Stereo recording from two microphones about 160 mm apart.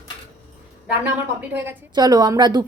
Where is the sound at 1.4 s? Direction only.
15° right (ahead or behind).